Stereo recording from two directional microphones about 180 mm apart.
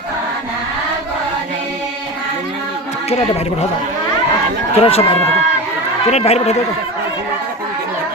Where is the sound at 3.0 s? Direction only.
35° left (ahead or behind).